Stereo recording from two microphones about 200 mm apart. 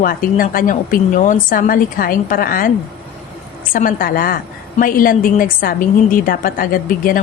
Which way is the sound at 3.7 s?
45° left (ahead or behind).